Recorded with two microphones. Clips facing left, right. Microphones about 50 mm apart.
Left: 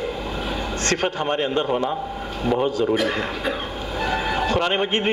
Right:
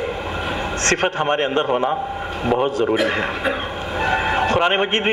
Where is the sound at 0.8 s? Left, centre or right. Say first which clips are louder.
Right 4 dB; right.